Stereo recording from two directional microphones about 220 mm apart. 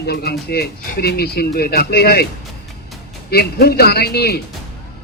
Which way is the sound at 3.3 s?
45° left (ahead or behind).